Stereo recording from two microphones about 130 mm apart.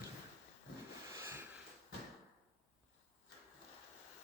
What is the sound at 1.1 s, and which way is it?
Wheeze, 20° right (ahead or behind).